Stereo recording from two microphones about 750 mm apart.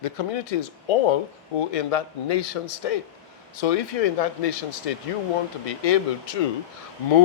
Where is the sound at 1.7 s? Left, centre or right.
Left.